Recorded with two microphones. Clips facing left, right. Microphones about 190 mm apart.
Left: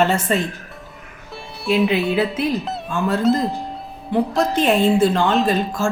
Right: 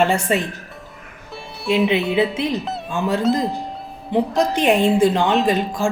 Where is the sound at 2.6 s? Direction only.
Centre (ahead or behind).